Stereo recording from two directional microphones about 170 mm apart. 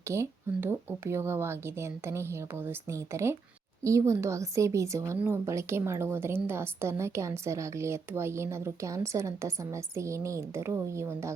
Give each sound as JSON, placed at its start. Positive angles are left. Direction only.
{"t": 0.1, "sound": "a woman's voice", "side_deg": -15}